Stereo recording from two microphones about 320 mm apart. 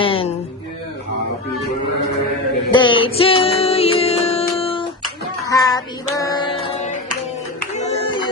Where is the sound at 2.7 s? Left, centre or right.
Centre.